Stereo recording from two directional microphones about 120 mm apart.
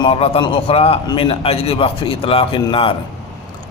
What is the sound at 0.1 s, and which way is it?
A man's voice, 55° left (ahead or behind).